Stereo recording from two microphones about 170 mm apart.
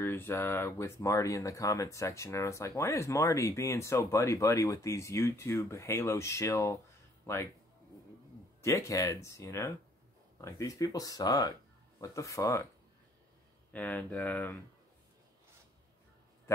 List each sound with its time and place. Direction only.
0.0 s speech: 15° left (ahead or behind)
8.6 s speech: 20° left (ahead or behind)
13.7 s speech: 10° left (ahead or behind)
16.5 s a sound: 15° left (ahead or behind)